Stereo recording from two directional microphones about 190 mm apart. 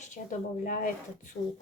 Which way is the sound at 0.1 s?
45° left (ahead or behind).